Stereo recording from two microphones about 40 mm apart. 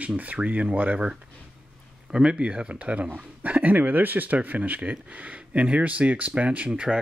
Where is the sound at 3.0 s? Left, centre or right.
Right.